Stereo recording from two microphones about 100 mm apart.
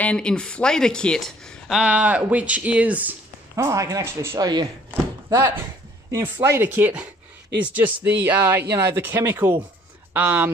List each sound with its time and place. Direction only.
0.0 s speech: 10° left (ahead or behind)
1.8 s speech: 15° right (ahead or behind)
3.5 s speech: 35° right (ahead or behind)
4.4 s speech: 45° right (ahead or behind)
4.9 s chopping: 25° right (ahead or behind)
6.3 s speech: 25° right (ahead or behind)